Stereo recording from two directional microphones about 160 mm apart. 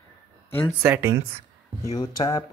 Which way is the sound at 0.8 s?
15° right (ahead or behind).